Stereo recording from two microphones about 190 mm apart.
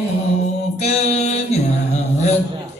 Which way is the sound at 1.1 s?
35° left (ahead or behind).